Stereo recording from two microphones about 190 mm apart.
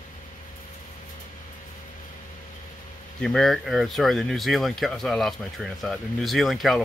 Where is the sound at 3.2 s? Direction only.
Centre (ahead or behind).